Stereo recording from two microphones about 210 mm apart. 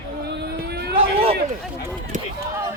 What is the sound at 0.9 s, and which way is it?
Speech, 25° right (ahead or behind).